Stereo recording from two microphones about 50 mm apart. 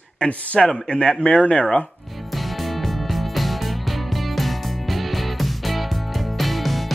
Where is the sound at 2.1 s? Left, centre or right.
Centre.